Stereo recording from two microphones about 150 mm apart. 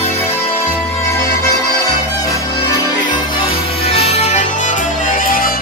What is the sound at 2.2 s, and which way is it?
Music, 25° left (ahead or behind).